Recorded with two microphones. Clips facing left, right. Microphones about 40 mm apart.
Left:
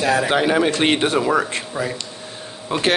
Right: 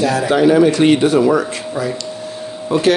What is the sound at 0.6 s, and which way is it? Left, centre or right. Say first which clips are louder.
Speech: right 6 dB; left.